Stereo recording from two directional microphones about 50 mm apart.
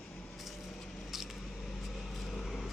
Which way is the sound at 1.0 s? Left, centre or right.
Centre.